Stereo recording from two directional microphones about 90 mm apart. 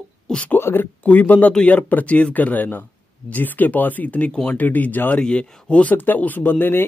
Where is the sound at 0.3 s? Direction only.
15° left (ahead or behind).